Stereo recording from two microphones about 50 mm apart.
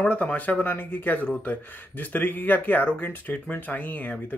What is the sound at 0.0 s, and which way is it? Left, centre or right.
Speech, left.